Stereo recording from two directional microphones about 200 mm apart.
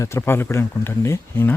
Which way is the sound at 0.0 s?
15° left (ahead or behind).